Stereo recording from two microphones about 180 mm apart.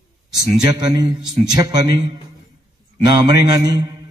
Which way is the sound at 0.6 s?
20° right (ahead or behind).